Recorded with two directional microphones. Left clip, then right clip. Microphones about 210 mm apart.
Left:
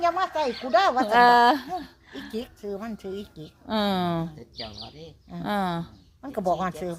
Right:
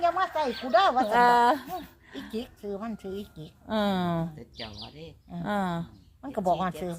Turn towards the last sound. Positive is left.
turn(degrees=10)  # may be behind; listen again after turning